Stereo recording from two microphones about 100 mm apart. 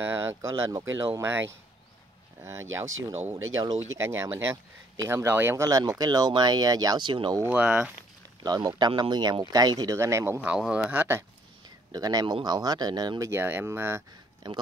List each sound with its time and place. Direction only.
0.0 s speech: 25° right (ahead or behind)
2.4 s speech: 30° right (ahead or behind)
5.7 s speech: 40° right (ahead or behind)
7.4 s speech: 15° right (ahead or behind)
8.5 s speech: 45° right (ahead or behind)
9.9 s speech: 30° right (ahead or behind)
10.4 s speech: 10° right (ahead or behind)
11.9 s speech: 40° right (ahead or behind)
13.3 s speech: 20° right (ahead or behind)
14.4 s speech: 45° right (ahead or behind)